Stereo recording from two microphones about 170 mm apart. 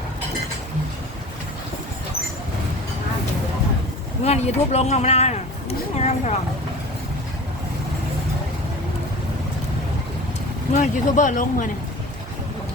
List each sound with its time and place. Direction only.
4.2 s speech: 40° left (ahead or behind)
10.8 s speech: 45° left (ahead or behind)